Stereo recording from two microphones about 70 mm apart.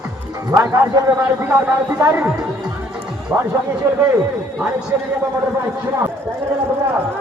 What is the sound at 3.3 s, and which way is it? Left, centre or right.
Speech, right.